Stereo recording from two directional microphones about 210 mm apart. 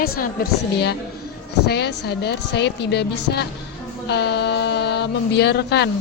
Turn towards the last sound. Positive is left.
turn(degrees=55)  # may be behind; listen again after turning